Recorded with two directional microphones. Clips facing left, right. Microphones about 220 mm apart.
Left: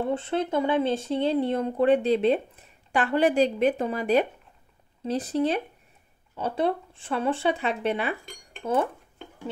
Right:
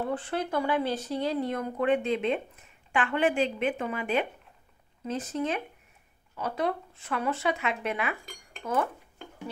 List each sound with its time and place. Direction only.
0.0 s speech: 25° left (ahead or behind)